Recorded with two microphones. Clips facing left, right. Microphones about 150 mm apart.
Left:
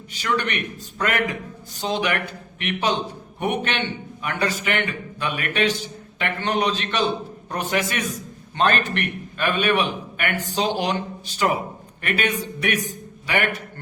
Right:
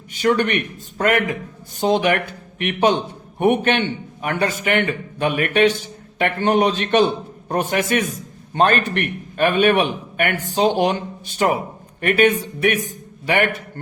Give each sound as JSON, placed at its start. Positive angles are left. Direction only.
{"t": 0.2, "sound": "a man's voice", "side_deg": -50}
{"t": 12.0, "sound": "a man's voice", "side_deg": -50}